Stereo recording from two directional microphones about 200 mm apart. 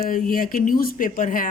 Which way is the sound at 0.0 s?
45° left (ahead or behind).